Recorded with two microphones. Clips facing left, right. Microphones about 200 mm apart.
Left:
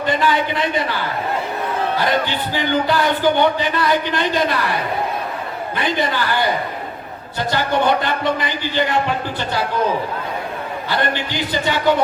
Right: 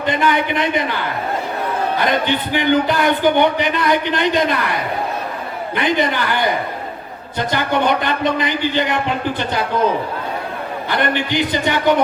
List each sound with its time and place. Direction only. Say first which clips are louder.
0.0 s a man's voice: right 1 dB; 20° right (ahead or behind)
2.0 s a man's voice: right 3 dB; 20° right (ahead or behind)
5.7 s a man's voice: right 3 dB; 20° right (ahead or behind)
10.8 s a man's voice: right 3 dB; 20° right (ahead or behind)